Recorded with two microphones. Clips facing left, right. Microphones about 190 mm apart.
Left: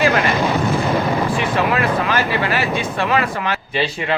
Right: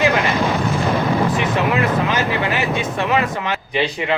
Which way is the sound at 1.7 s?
20° right (ahead or behind).